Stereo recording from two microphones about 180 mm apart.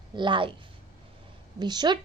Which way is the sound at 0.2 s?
25° right (ahead or behind).